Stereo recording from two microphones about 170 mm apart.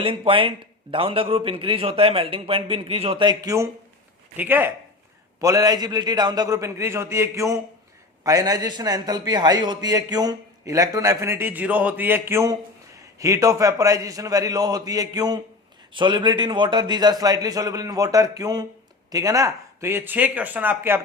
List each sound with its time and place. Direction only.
0.0 s a man's voice: 30° right (ahead or behind); by 21.0 s 10° right (ahead or behind)